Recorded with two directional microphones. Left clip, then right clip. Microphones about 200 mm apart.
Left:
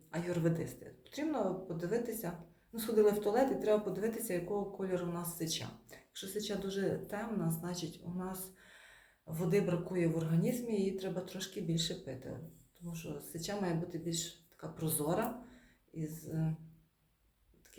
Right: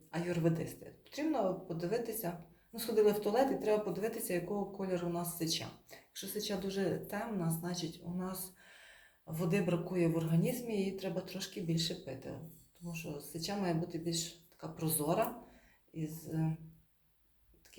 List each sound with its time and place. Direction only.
0.1 s speech: 25° left (ahead or behind)